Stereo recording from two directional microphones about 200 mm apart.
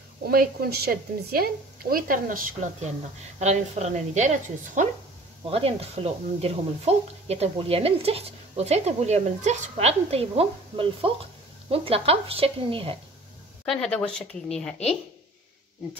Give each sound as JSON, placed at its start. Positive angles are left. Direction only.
{"t": 0.3, "sound": "a woman's voice", "side_deg": -50}
{"t": 13.7, "sound": "a woman's voice", "side_deg": 5}